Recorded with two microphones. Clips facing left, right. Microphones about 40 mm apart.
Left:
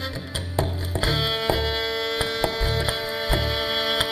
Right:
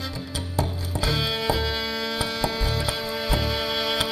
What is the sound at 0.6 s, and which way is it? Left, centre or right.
Music, left.